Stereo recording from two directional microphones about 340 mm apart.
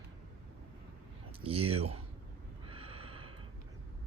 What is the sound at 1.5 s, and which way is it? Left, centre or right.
Speech, centre.